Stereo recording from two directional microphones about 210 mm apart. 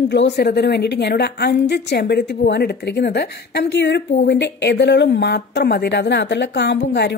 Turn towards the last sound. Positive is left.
turn(degrees=55)  # may be behind; listen again after turning